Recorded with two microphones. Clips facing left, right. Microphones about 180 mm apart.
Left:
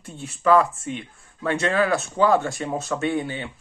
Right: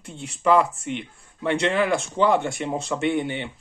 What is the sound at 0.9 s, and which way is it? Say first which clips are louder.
Speech: right 2 dB; 20° right (ahead or behind).